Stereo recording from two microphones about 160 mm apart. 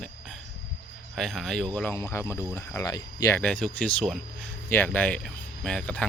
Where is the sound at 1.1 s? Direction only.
Centre (ahead or behind).